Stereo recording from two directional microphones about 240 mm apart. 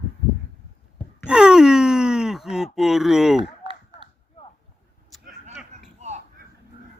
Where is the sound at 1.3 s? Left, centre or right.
Centre.